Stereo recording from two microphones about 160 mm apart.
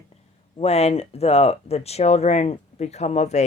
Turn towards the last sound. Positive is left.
turn(degrees=45)  # may be behind; listen again after turning